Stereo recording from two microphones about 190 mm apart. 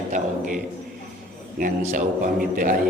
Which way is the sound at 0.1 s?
40° right (ahead or behind).